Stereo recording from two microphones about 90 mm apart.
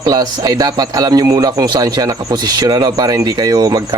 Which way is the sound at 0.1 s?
45° right (ahead or behind).